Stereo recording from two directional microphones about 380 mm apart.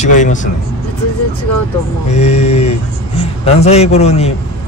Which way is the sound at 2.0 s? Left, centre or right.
Centre.